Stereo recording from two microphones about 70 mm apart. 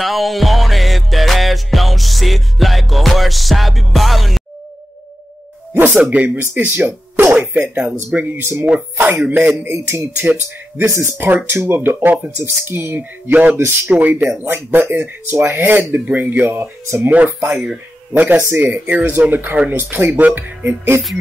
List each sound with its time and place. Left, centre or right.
0.0 s music: centre
5.7 s speech: right
10.9 s speech: right
17.0 s speech: right